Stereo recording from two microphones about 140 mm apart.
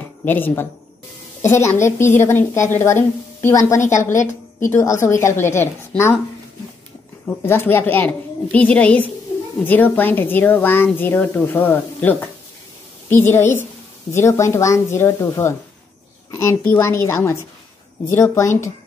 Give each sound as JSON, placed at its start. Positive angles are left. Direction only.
{"t": 0.2, "sound": "a woman's voice", "side_deg": 15}
{"t": 7.2, "sound": "a woman's voice", "side_deg": 15}